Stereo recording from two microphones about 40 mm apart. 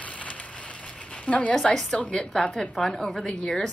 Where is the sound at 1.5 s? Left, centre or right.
Centre.